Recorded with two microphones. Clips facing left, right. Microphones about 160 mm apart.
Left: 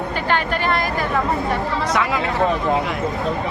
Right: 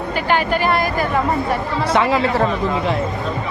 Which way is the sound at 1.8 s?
30° right (ahead or behind).